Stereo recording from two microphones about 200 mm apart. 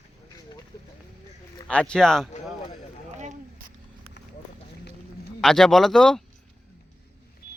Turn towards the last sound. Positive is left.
turn(degrees=0)  # may be behind; listen again after turning